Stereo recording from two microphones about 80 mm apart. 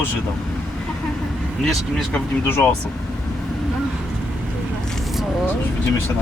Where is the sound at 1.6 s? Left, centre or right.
Centre.